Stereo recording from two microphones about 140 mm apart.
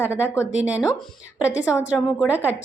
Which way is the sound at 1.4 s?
20° left (ahead or behind).